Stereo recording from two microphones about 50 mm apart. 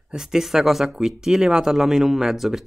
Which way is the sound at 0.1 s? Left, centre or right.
Centre.